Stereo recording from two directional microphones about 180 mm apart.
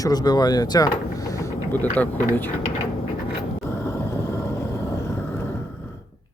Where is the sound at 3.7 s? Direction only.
15° left (ahead or behind).